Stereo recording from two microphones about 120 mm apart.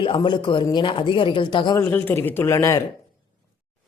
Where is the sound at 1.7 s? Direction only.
15° left (ahead or behind).